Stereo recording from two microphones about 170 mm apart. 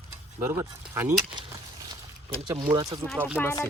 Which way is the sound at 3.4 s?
15° left (ahead or behind).